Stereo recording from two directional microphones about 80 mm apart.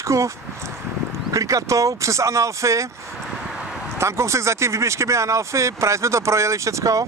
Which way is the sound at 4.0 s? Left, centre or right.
Right.